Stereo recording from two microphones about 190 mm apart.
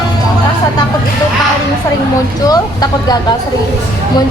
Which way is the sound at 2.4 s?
20° left (ahead or behind).